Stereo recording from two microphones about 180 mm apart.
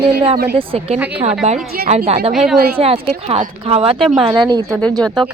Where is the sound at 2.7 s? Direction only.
30° right (ahead or behind).